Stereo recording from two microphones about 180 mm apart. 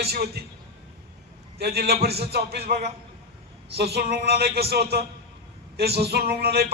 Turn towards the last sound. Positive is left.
turn(degrees=-60)  # may be behind; listen again after turning